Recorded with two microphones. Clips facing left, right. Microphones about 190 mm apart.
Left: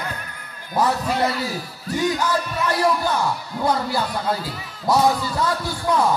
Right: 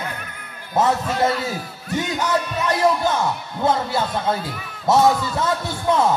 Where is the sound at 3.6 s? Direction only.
25° right (ahead or behind).